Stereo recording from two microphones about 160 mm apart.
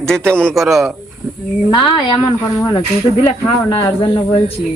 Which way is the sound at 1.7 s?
30° left (ahead or behind).